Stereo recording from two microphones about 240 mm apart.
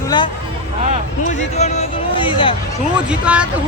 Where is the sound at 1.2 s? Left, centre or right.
Left.